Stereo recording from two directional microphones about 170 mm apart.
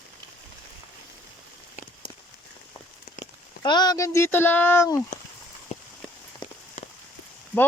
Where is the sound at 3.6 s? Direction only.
25° left (ahead or behind).